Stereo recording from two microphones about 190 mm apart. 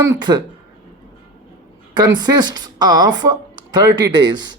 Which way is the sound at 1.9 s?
20° right (ahead or behind).